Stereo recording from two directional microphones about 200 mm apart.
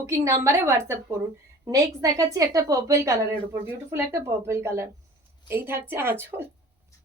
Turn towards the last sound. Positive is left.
turn(degrees=-10)  # may be behind; listen again after turning